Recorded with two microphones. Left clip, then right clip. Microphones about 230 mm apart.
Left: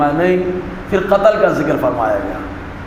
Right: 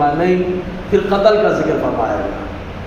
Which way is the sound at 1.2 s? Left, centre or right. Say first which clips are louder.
Right 1 dB; left.